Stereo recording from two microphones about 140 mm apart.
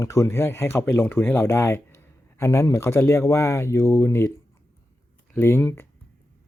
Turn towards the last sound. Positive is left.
turn(degrees=15)  # may be behind; listen again after turning